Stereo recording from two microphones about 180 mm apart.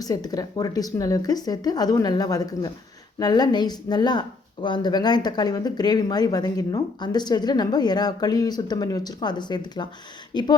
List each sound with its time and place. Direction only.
0.0 s speech: 20° left (ahead or behind)